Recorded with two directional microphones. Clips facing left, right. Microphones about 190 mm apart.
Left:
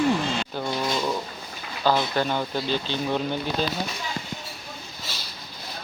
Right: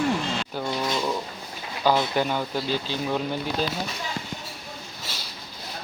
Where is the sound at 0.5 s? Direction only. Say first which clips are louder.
Right 2 dB; centre (ahead or behind).